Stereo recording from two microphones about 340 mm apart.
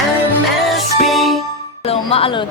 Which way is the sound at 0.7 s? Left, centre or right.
Centre.